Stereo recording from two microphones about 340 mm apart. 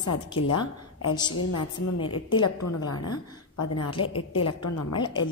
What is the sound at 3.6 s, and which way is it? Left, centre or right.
A woman's voice, left.